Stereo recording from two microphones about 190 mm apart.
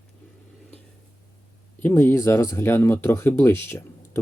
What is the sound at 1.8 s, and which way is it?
Speech, 10° left (ahead or behind).